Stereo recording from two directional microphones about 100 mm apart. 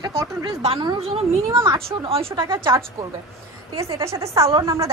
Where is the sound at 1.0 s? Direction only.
75° right (ahead or behind).